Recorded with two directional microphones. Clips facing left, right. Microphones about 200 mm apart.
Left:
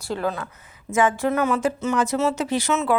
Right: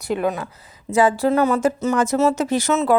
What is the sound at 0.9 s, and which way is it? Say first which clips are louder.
A woman's voice: right 4 dB; 35° right (ahead or behind).